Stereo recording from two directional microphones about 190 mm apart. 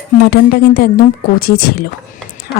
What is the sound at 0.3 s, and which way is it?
A woman's voice, 55° left (ahead or behind).